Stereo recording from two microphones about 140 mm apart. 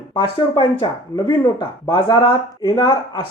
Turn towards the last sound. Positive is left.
turn(degrees=30)  # may be behind; listen again after turning